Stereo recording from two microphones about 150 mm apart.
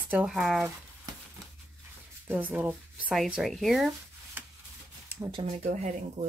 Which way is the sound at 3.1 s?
Centre (ahead or behind).